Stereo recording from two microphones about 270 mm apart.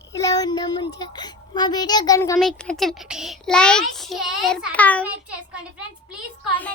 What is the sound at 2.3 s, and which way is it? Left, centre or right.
Child singing, centre.